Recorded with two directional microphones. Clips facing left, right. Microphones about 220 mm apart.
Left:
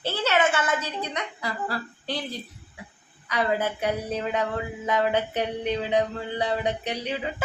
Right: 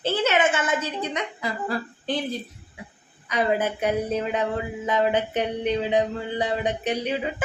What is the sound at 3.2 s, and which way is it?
A woman's voice, 20° right (ahead or behind).